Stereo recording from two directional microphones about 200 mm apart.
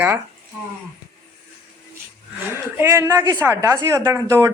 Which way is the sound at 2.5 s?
10° right (ahead or behind).